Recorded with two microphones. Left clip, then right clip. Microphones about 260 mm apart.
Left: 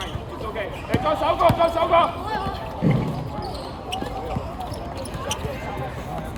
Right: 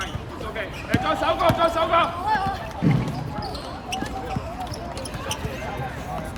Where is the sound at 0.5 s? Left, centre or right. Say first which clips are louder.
Even; left.